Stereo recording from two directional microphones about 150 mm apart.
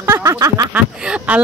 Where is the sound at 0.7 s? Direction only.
10° right (ahead or behind).